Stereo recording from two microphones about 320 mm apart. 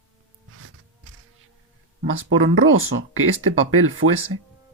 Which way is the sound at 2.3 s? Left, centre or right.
Right.